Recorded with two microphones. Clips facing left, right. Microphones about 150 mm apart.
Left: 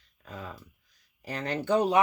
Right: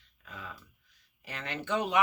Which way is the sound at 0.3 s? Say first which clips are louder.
Left 5 dB; 40° left (ahead or behind).